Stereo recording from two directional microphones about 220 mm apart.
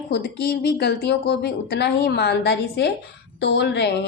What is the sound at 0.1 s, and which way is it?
A woman's voice, 45° left (ahead or behind).